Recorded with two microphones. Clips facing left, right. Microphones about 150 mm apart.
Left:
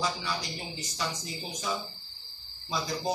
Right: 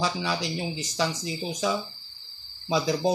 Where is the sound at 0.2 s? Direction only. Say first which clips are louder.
Right 7 dB; 90° right.